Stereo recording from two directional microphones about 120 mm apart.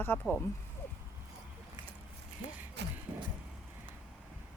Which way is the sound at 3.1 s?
15° right (ahead or behind).